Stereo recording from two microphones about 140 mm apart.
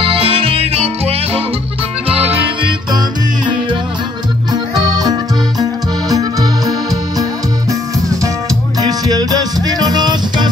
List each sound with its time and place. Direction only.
0.0 s music: 40° right (ahead or behind)
4.5 s music: 30° right (ahead or behind)
8.7 s music: 25° right (ahead or behind)